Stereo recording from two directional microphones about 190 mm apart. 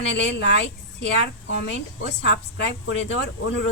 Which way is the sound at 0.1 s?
65° left (ahead or behind).